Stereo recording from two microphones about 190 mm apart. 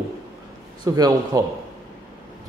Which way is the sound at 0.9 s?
20° right (ahead or behind).